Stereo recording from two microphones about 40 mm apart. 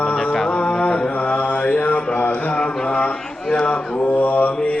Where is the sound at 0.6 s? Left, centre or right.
Left.